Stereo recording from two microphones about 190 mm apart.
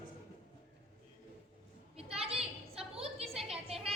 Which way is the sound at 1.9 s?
30° right (ahead or behind).